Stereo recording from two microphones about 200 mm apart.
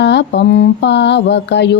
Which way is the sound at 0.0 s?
60° left (ahead or behind).